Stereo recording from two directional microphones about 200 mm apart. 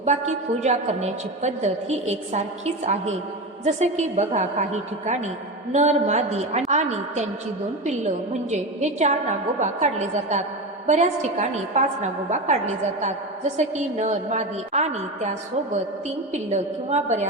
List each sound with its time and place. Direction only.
0.0 s a woman's voice: 35° right (ahead or behind)